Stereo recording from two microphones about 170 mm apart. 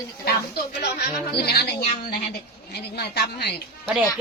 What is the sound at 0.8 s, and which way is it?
Speech, 70° left (ahead or behind).